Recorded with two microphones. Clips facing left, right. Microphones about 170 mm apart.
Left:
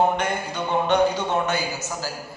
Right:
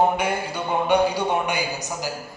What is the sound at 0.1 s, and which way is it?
A man's voice, 10° right (ahead or behind).